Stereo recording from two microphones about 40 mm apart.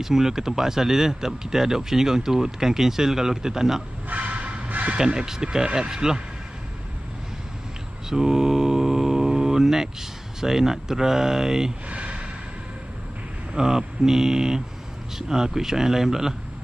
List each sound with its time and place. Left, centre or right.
0.0 s speech: centre
4.1 s train: right
4.6 s a sound: right
4.9 s speech: centre
8.1 s mantra: centre
10.4 s speech: centre
11.9 s a sound: right
13.6 s speech: centre